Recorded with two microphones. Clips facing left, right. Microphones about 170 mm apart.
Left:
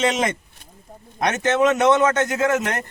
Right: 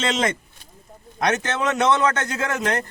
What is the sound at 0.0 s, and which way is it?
A man's voice, 15° left (ahead or behind).